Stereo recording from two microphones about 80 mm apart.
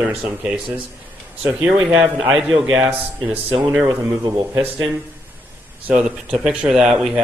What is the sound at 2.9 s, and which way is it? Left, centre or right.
A man's voice, centre.